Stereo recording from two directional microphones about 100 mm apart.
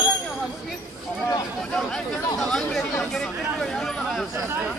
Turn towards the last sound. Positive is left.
turn(degrees=5)  # may be behind; listen again after turning